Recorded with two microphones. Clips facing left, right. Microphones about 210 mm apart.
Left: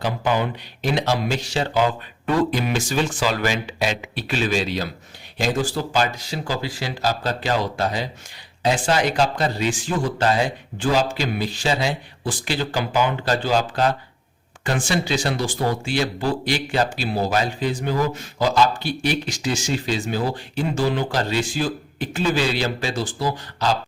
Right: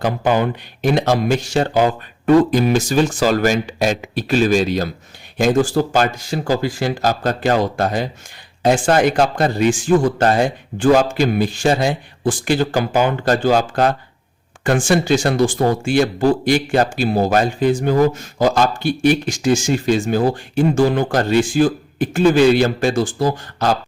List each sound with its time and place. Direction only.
0.0 s speech: 50° right (ahead or behind)